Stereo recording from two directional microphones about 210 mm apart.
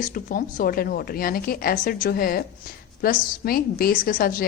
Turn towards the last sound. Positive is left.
turn(degrees=45)  # may be behind; listen again after turning